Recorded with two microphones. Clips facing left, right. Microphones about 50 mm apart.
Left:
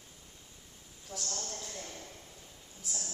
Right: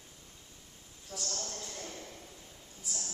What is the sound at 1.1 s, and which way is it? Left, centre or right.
Speech, left.